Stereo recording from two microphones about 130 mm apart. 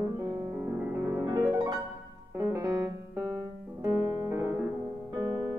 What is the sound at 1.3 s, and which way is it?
Piano, 30° right (ahead or behind).